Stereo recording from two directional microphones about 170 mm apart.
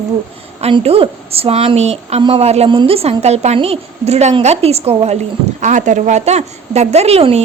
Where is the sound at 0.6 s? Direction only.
35° right (ahead or behind).